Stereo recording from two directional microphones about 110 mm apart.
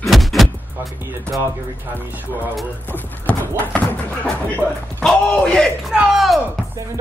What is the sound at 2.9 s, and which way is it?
Speech, 15° left (ahead or behind).